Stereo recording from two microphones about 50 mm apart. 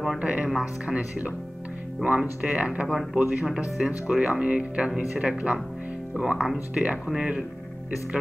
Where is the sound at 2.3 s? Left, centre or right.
Right.